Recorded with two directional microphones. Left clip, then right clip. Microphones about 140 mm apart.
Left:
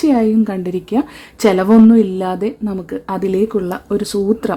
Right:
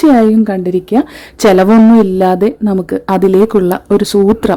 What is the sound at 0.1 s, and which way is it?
A woman's voice, 25° right (ahead or behind).